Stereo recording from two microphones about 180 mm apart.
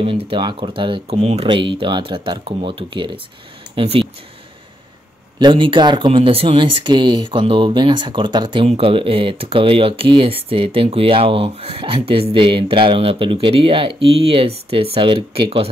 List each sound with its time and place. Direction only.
0.0 s speech: 30° right (ahead or behind)
5.4 s speech: 25° right (ahead or behind)